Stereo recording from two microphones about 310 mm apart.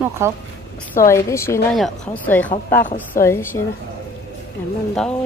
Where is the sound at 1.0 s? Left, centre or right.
Centre.